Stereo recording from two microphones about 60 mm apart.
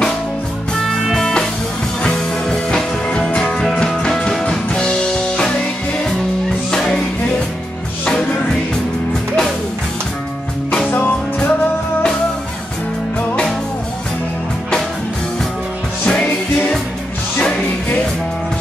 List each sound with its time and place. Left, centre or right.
0.8 s music: centre
6.7 s music: centre
10.9 s music: left
16.1 s music: left